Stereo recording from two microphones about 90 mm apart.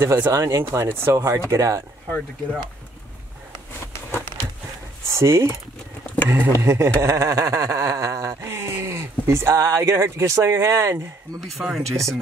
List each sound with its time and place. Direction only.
0.0 s speech: 30° right (ahead or behind)
2.0 s speech: 10° left (ahead or behind)
5.1 s speech: 35° right (ahead or behind)
6.2 s speech: 20° right (ahead or behind)
6.6 s speech: 30° right (ahead or behind)
11.6 s speech: centre (ahead or behind)